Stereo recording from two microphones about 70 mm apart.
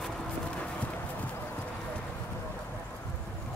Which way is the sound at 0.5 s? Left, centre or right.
Centre.